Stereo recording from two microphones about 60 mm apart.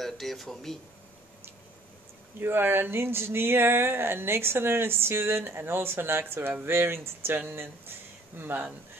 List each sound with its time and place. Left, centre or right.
0.0 s speech: centre
2.4 s speech: right